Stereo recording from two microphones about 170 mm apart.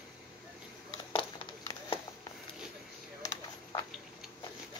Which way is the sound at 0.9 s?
30° left (ahead or behind).